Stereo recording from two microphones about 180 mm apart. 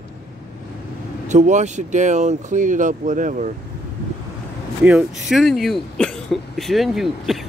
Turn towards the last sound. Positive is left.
turn(degrees=0)  # may be behind; listen again after turning